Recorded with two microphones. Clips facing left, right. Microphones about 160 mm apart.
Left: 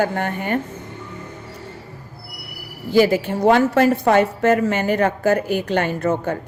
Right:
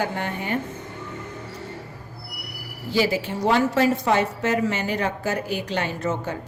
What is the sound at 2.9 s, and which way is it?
A woman's voice, 50° left (ahead or behind).